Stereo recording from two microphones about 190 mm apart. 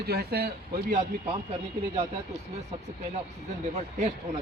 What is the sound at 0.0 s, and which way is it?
Speech, 55° right (ahead or behind).